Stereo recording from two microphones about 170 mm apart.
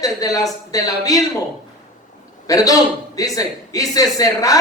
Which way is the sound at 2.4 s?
20° left (ahead or behind).